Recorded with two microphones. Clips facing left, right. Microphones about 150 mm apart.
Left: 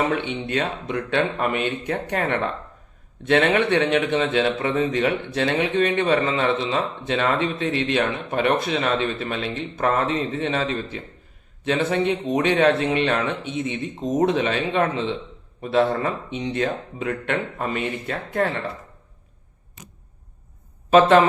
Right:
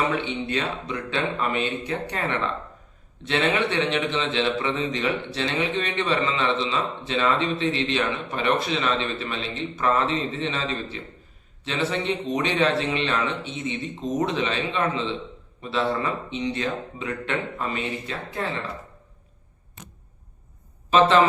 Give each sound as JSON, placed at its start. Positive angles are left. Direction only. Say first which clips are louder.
{"t": 0.1, "sound": "a man's voice", "louder": "left 2 dB", "side_deg": 50}